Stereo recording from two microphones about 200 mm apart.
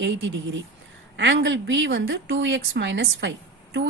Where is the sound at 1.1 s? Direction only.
60° right (ahead or behind).